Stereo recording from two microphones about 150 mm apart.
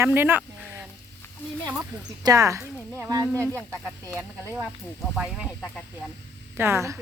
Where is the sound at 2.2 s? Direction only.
20° right (ahead or behind).